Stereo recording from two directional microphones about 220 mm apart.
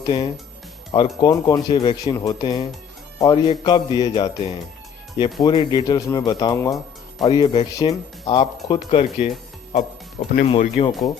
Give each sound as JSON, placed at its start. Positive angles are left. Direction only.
{"t": 0.0, "sound": "speech", "side_deg": 20}
{"t": 10.4, "sound": "speech", "side_deg": 25}